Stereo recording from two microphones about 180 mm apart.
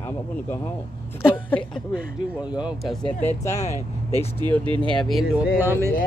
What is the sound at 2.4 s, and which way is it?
Speech, 5° right (ahead or behind).